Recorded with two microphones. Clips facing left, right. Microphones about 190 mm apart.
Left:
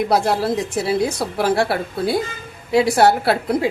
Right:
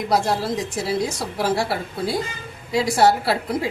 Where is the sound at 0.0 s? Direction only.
60° left (ahead or behind).